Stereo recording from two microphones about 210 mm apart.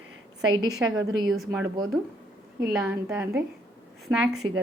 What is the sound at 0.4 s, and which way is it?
A woman's voice, 20° right (ahead or behind).